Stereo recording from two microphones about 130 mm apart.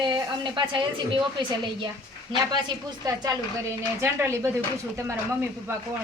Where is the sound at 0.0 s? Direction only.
35° right (ahead or behind).